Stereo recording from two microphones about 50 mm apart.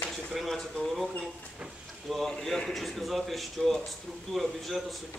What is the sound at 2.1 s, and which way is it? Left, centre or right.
Speech, centre.